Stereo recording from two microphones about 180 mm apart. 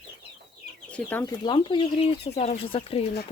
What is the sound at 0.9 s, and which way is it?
Speech, 10° left (ahead or behind).